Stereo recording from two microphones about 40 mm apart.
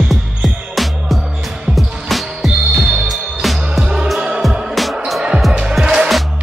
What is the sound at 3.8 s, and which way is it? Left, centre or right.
Music, centre.